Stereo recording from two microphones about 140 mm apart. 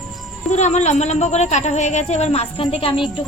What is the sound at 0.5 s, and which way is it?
Speech, 55° left (ahead or behind).